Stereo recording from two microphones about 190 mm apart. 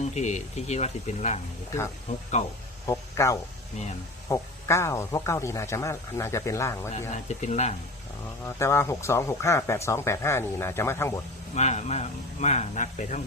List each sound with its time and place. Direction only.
0.0 s speech: 35° left (ahead or behind)
2.8 s speech: 15° left (ahead or behind)
7.1 s speech: 35° left (ahead or behind)
8.4 s speech: 15° left (ahead or behind)
11.5 s speech: 35° left (ahead or behind)